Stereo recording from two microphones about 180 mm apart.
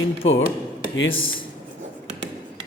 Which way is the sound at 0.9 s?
90° left.